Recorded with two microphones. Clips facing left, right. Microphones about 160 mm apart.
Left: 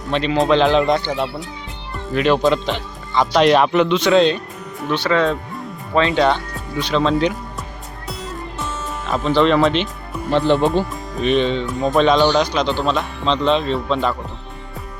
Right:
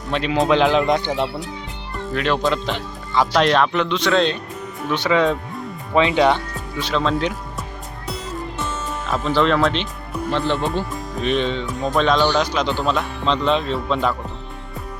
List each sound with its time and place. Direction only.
0.1 s speech: 5° right (ahead or behind)
2.1 s speech: 5° left (ahead or behind)
4.9 s speech: 15° right (ahead or behind)
6.7 s speech: centre (ahead or behind)
8.0 s music: centre (ahead or behind)
10.3 s speech: 20° left (ahead or behind)
10.9 s speech: centre (ahead or behind)